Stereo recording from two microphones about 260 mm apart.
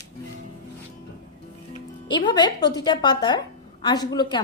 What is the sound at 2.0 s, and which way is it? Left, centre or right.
Speech, centre.